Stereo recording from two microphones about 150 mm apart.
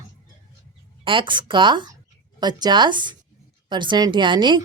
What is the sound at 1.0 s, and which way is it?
A woman's voice, 35° right (ahead or behind).